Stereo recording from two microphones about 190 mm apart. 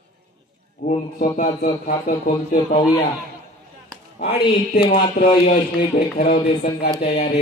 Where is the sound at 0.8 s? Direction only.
45° left (ahead or behind).